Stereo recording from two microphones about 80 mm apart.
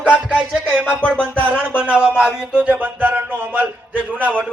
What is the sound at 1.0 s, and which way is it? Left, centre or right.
Music, centre.